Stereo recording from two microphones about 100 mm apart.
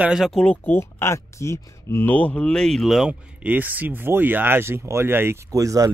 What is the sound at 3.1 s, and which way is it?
Speech, 15° right (ahead or behind).